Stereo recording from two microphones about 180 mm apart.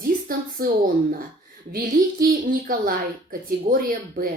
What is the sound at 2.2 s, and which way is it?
A woman's voice, 50° right (ahead or behind).